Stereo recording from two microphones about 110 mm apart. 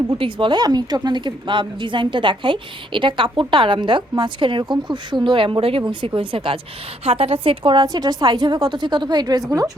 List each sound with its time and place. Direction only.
0.1 s a woman's voice: 50° right (ahead or behind)
7.0 s a woman's voice: 65° right (ahead or behind); by 9.7 s 35° right (ahead or behind)